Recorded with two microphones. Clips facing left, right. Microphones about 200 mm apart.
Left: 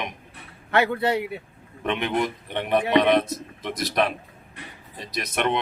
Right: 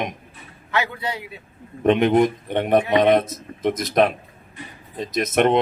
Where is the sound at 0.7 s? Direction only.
55° left (ahead or behind).